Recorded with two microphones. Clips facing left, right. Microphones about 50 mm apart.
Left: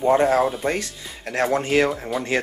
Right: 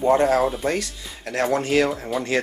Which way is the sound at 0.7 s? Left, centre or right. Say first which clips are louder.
Right 1 dB; left.